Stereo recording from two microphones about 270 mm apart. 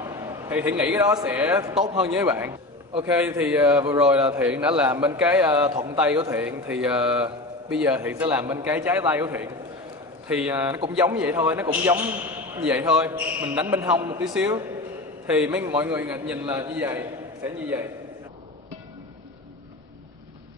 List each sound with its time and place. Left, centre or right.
0.0 s a man's voice: centre